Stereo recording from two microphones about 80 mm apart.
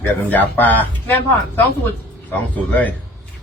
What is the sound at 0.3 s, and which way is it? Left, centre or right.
A woman's voice, left.